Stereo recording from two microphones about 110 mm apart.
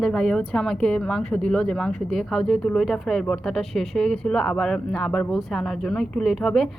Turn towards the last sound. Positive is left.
turn(degrees=5)  # may be behind; listen again after turning